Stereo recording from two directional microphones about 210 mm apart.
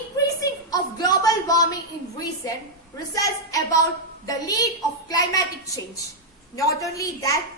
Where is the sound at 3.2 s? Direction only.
15° left (ahead or behind).